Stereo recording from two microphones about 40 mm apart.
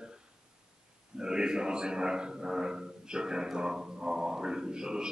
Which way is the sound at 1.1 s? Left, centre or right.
Centre.